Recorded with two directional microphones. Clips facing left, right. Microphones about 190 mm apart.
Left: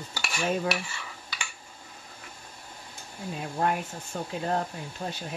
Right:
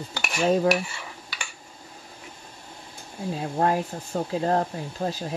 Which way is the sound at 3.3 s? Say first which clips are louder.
Right 4 dB; 30° right (ahead or behind).